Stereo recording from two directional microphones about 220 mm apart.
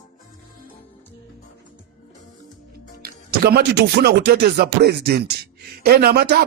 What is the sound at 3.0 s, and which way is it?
Speech, 45° right (ahead or behind).